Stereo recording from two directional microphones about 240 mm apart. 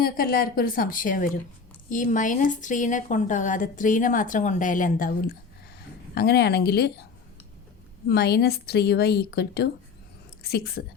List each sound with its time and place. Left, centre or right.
0.0 s a woman's voice: left
6.1 s a woman's voice: left
8.0 s a woman's voice: left